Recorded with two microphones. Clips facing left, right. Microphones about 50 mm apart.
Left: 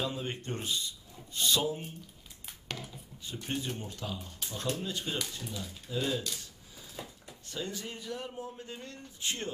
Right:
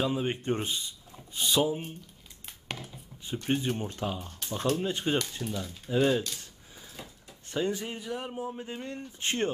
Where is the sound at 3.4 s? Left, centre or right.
Right.